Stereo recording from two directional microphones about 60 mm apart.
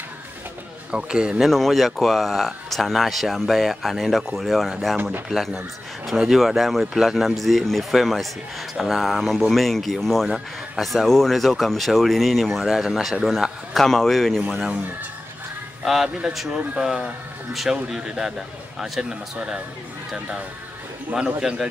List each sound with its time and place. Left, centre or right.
0.9 s speech: centre
1.4 s a man's voice: centre
15.8 s a man's voice: centre
16.5 s speech: centre
21.1 s speech: centre